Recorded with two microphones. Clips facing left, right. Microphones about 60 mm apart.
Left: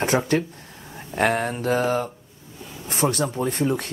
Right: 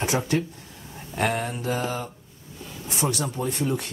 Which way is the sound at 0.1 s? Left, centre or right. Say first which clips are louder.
Left 5 dB; left.